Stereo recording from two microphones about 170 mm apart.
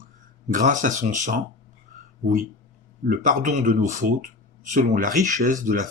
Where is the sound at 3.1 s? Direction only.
50° right (ahead or behind).